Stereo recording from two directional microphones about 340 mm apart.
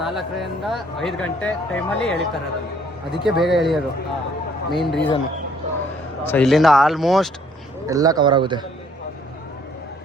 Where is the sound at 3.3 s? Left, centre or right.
Centre.